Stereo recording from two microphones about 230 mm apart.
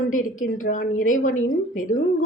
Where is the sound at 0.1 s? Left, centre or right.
Left.